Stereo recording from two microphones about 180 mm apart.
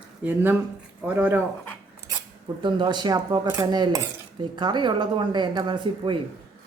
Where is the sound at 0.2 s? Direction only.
10° right (ahead or behind).